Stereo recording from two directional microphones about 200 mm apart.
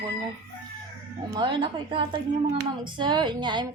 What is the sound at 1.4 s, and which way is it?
A woman's voice, 25° right (ahead or behind).